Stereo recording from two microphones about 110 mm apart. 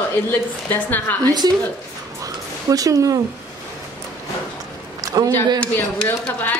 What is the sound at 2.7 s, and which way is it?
Speech, 30° right (ahead or behind).